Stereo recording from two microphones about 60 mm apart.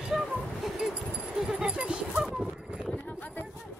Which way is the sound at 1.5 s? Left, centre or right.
Centre.